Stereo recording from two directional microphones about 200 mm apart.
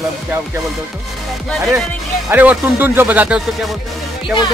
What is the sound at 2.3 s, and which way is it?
Speech, 10° right (ahead or behind).